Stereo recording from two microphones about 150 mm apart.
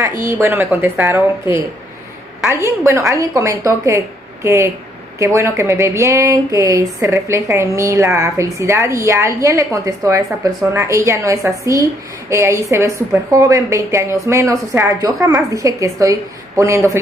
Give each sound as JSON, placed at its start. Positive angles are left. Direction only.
{"t": 0.2, "sound": "a woman's voice", "side_deg": -20}